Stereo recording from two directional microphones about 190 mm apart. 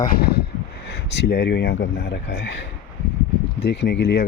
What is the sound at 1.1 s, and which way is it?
Speech, 60° left (ahead or behind).